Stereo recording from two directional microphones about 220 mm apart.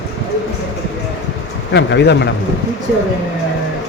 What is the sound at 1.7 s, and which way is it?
Speech, 50° left (ahead or behind).